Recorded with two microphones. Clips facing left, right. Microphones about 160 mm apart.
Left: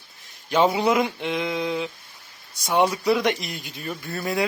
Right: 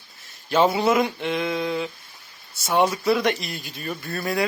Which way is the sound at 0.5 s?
15° left (ahead or behind).